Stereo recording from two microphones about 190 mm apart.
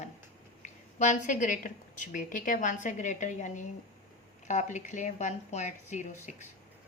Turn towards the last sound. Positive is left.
turn(degrees=40)  # may be behind; listen again after turning